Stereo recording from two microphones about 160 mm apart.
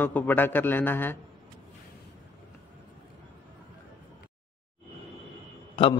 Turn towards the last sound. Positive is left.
turn(degrees=30)  # may be behind; listen again after turning